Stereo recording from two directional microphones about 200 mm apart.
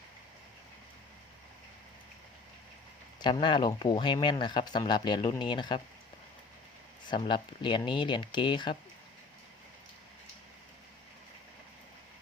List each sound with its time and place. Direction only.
3.2 s speech: 20° left (ahead or behind)
7.1 s speech: 25° left (ahead or behind)